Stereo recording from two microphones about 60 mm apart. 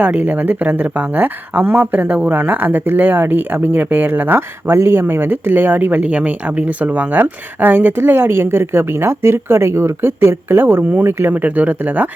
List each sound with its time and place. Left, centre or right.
0.0 s speech: right
11.4 s speech: right